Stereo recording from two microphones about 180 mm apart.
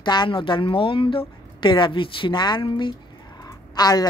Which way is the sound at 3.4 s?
20° left (ahead or behind).